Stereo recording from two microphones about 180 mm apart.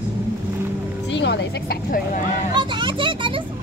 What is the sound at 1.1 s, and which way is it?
Music, 80° left.